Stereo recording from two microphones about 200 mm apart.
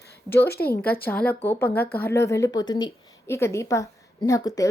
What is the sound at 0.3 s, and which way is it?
Speech, 15° left (ahead or behind).